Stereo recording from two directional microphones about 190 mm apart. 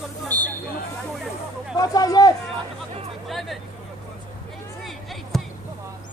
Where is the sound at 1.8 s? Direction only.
20° left (ahead or behind).